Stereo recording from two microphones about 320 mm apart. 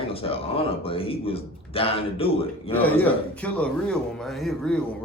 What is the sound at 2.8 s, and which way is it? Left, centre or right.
Speech, centre.